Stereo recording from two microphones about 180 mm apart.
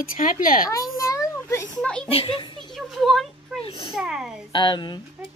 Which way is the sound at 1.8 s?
5° left (ahead or behind).